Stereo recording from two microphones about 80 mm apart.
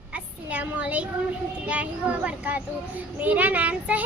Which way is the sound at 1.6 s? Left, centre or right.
Centre.